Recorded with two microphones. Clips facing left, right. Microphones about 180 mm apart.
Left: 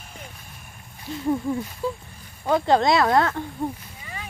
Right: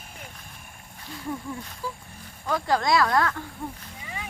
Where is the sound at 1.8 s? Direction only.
25° left (ahead or behind).